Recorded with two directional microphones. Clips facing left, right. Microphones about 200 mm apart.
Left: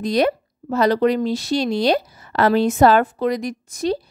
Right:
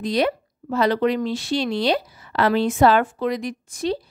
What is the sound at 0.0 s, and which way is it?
Speech, 45° left (ahead or behind).